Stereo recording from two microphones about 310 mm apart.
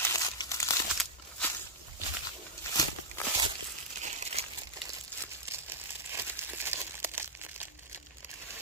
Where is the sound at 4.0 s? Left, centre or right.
Right.